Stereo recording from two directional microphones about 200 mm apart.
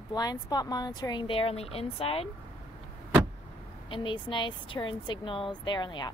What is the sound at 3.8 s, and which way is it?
A woman's voice, 25° left (ahead or behind).